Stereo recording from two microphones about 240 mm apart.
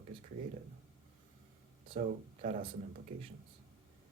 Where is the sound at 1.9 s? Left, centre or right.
Right.